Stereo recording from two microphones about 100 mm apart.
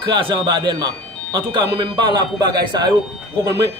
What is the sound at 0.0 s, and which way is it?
A man's voice, 55° right (ahead or behind).